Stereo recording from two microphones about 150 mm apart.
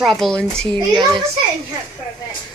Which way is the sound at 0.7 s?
25° right (ahead or behind).